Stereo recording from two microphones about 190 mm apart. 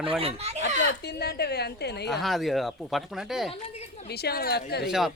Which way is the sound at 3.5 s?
35° left (ahead or behind).